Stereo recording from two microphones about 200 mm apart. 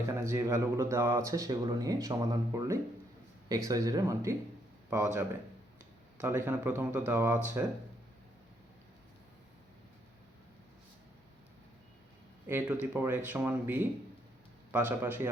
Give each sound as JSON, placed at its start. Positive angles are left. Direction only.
{"t": 0.2, "sound": "speech", "side_deg": -15}
{"t": 6.2, "sound": "speech", "side_deg": -10}
{"t": 12.5, "sound": "speech", "side_deg": -10}